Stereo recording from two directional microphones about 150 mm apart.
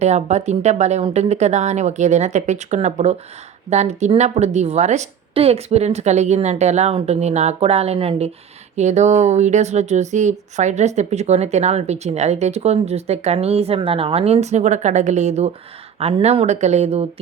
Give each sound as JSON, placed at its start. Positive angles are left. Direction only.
{"t": 0.0, "sound": "speech", "side_deg": -50}